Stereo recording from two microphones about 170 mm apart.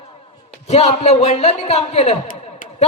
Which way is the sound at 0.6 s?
40° left (ahead or behind).